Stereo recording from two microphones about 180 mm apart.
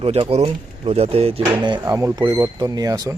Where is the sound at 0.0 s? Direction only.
35° right (ahead or behind).